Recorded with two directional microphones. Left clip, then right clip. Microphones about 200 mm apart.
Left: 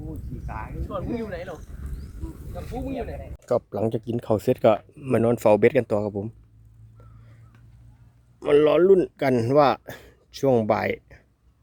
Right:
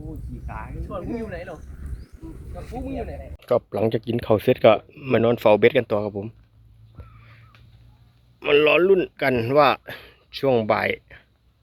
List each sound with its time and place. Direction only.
0.4 s speech: 10° right (ahead or behind)
1.2 s speech: 10° left (ahead or behind)
1.5 s a sound: 25° left (ahead or behind)
2.6 s speech: 5° left (ahead or behind)
8.4 s speech: 25° left (ahead or behind)